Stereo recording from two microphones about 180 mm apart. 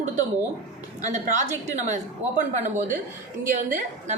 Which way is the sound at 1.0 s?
40° right (ahead or behind).